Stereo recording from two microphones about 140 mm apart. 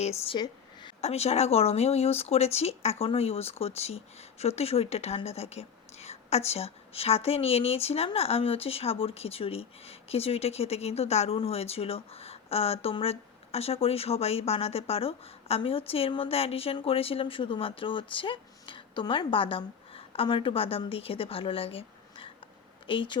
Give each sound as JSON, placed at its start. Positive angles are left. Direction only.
{"t": 0.0, "sound": "speech", "side_deg": 50}
{"t": 0.3, "sound": "a sound", "side_deg": 30}
{"t": 1.0, "sound": "speech", "side_deg": 50}